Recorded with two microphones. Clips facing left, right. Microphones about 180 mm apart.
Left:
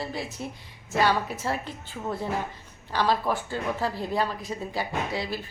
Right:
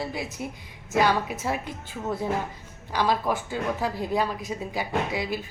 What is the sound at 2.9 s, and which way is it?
A woman's voice, 10° right (ahead or behind).